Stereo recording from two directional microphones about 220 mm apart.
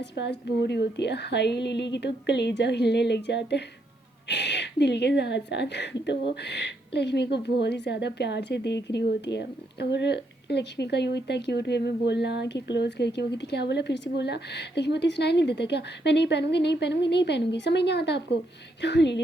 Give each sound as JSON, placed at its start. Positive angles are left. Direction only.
{"t": 0.0, "sound": "a woman's voice", "side_deg": 50}